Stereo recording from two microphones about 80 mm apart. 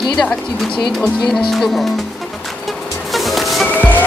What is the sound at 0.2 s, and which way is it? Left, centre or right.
Speech, centre.